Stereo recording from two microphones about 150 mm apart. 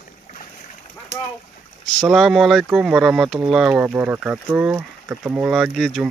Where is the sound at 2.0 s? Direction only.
Centre (ahead or behind).